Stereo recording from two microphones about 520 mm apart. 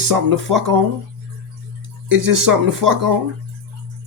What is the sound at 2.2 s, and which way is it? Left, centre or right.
Speech, right.